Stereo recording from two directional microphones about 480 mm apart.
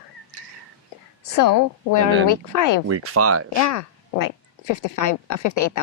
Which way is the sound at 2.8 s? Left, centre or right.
Right.